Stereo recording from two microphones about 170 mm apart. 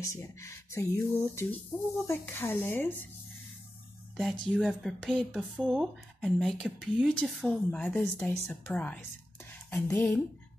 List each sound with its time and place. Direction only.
0.0 s speech: 15° left (ahead or behind)
4.2 s speech: centre (ahead or behind)